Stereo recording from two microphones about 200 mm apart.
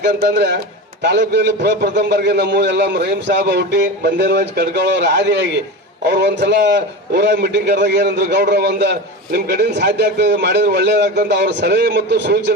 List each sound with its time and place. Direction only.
0.0 s a man's voice: 55° right (ahead or behind)